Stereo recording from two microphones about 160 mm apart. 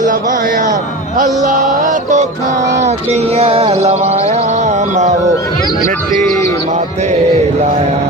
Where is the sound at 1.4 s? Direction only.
50° right (ahead or behind).